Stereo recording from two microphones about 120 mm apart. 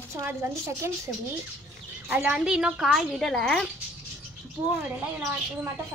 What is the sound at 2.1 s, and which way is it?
Speech, 10° right (ahead or behind).